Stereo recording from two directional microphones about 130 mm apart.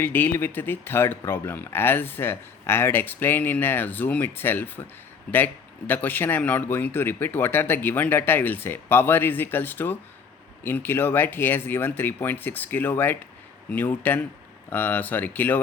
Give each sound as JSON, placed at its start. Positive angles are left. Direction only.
{"t": 0.0, "sound": "speech", "side_deg": 15}
{"t": 5.9, "sound": "speech", "side_deg": 15}